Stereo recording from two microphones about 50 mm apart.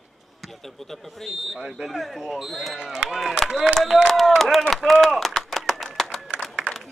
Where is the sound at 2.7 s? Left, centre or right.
Centre.